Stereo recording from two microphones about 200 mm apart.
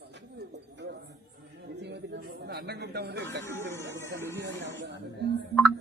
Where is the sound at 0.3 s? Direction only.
55° right (ahead or behind).